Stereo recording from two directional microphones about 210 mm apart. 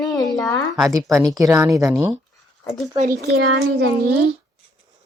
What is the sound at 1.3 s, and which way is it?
Speech, 15° right (ahead or behind).